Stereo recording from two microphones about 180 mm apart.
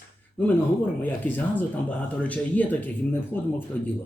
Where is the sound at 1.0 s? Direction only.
10° left (ahead or behind).